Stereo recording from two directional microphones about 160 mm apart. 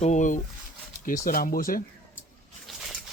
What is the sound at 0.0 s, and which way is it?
Speech, 50° left (ahead or behind).